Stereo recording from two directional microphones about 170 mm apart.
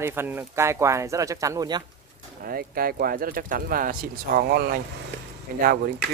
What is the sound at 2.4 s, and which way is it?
Speech, 60° right (ahead or behind).